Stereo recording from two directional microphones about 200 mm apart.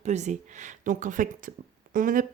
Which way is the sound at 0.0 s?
35° right (ahead or behind).